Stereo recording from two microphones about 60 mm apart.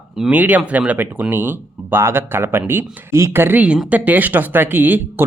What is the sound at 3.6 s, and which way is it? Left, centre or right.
Speech, centre.